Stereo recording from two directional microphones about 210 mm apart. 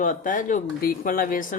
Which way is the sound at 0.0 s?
40° left (ahead or behind).